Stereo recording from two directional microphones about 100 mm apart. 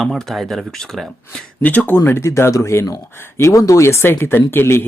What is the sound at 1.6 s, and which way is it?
Speech, 15° left (ahead or behind).